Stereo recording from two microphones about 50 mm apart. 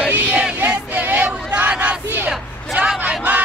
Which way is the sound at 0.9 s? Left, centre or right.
Right.